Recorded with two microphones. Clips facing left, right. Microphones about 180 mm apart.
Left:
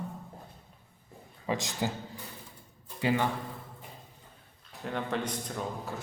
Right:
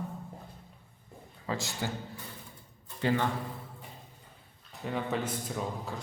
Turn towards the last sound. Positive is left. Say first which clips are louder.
# even
turn(degrees=0)  # may be behind; listen again after turning